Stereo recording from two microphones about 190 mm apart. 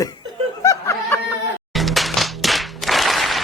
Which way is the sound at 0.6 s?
15° left (ahead or behind).